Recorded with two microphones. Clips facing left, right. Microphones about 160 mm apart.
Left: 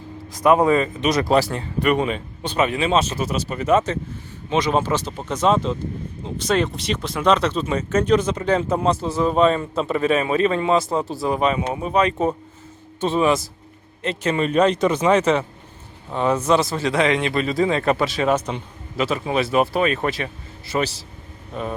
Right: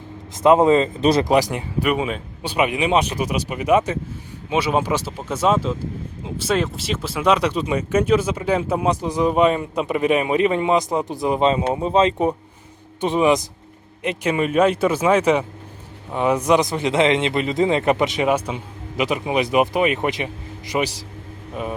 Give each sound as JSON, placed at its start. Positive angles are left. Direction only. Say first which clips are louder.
{"t": 0.3, "sound": "speech", "louder": "right 2 dB", "side_deg": -25}
{"t": 1.2, "sound": "speech", "louder": "right 1 dB", "side_deg": -15}